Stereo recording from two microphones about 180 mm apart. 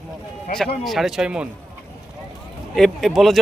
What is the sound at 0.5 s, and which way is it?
Speech, 45° left (ahead or behind).